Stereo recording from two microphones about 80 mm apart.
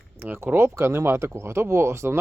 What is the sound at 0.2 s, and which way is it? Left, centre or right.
Speech, right.